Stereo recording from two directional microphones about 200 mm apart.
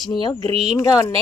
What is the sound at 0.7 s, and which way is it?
Speech, 15° left (ahead or behind).